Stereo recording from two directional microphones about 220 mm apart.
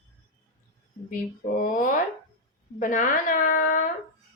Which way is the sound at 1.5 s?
40° left (ahead or behind).